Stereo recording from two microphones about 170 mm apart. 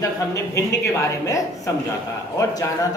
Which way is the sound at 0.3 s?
15° left (ahead or behind).